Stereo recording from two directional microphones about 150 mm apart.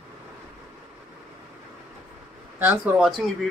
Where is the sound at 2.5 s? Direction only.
10° right (ahead or behind).